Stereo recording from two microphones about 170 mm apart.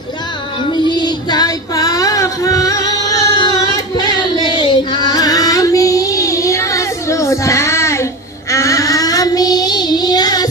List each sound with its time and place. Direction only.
0.7 s child singing: 25° left (ahead or behind)
3.7 s music: 25° left (ahead or behind)